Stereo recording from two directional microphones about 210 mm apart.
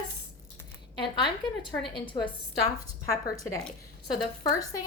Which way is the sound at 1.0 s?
20° left (ahead or behind).